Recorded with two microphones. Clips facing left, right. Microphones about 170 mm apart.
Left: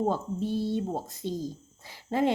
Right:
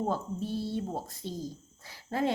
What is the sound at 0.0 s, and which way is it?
Speech, 20° left (ahead or behind).